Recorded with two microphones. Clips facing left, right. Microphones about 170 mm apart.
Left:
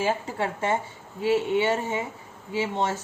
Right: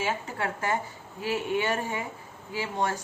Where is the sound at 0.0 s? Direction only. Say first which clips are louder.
Left 4 dB; 25° left (ahead or behind).